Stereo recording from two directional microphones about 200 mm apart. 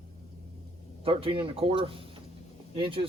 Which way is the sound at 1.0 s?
25° right (ahead or behind).